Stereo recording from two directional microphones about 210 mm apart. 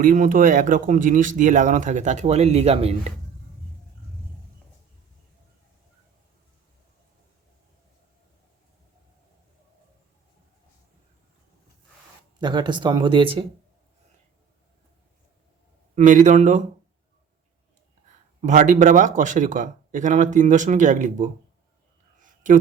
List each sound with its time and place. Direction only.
0.0 s speech: 40° right (ahead or behind)
12.4 s speech: 20° right (ahead or behind)
16.0 s speech: 35° right (ahead or behind)
18.4 s speech: 35° right (ahead or behind)